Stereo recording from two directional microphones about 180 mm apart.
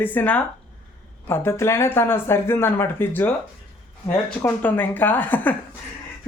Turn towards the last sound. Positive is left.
turn(degrees=10)  # may be behind; listen again after turning